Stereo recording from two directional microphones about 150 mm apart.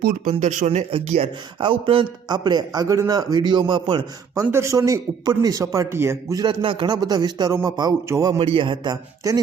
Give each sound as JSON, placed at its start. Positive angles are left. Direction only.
{"t": 0.0, "sound": "a man's voice", "side_deg": -65}
{"t": 4.4, "sound": "a man's voice", "side_deg": -20}
{"t": 8.4, "sound": "a man's voice", "side_deg": -35}